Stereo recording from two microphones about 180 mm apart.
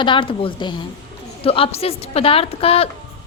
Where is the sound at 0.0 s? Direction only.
30° left (ahead or behind).